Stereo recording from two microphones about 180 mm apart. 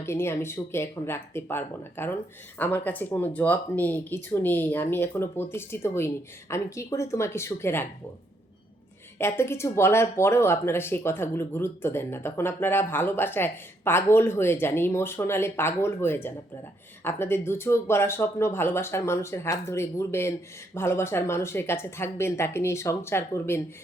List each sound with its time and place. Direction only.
0.0 s speech: 15° left (ahead or behind)
9.1 s speech: 15° left (ahead or behind)